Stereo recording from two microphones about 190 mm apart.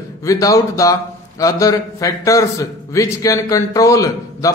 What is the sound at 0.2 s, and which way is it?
A man's voice, 15° left (ahead or behind).